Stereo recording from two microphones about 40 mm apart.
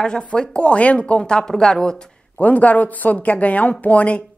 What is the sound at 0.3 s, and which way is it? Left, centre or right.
Speech, left.